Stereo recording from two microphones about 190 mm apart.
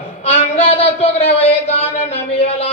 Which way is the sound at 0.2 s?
30° left (ahead or behind).